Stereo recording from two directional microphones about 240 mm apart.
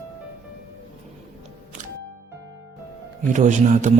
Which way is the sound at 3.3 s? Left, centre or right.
Right.